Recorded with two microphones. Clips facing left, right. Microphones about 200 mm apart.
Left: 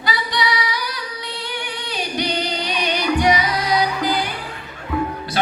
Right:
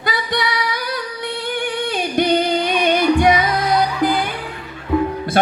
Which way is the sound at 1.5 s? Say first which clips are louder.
Right 7 dB; 50° right (ahead or behind).